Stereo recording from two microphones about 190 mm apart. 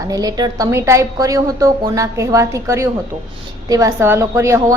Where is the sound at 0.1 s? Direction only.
20° right (ahead or behind).